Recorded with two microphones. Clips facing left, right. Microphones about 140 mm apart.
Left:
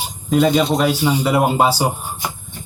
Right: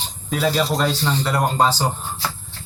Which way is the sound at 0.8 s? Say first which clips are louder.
Left 4 dB; 10° left (ahead or behind).